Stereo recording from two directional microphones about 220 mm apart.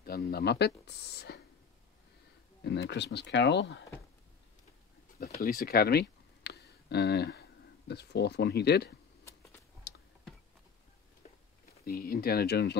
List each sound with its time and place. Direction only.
0.0 s speech: 45° left (ahead or behind)
2.6 s speech: 50° left (ahead or behind)
5.4 s a sound: 45° left (ahead or behind)
7.9 s speech: 50° left (ahead or behind)
11.8 s speech: 40° left (ahead or behind)